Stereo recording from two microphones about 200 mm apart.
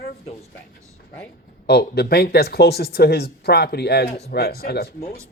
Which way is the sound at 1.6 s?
55° left (ahead or behind).